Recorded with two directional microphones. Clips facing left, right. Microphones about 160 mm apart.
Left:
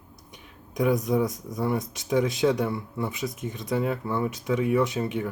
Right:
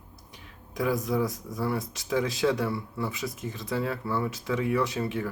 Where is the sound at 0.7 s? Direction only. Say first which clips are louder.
Left 4 dB; 20° left (ahead or behind).